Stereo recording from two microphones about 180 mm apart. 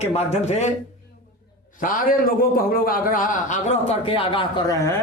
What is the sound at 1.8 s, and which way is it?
A man's voice, 50° left (ahead or behind).